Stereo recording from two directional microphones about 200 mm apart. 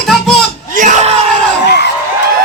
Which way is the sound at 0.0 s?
Centre (ahead or behind).